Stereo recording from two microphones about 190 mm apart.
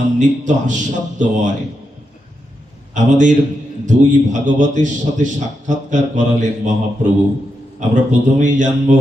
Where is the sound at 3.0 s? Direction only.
40° right (ahead or behind).